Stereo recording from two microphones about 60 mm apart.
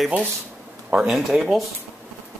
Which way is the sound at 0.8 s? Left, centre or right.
Centre.